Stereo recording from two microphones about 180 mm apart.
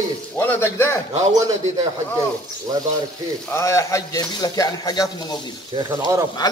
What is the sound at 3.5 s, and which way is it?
A man's voice, 15° left (ahead or behind).